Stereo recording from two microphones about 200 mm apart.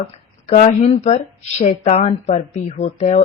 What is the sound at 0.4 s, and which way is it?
Speech, 35° left (ahead or behind).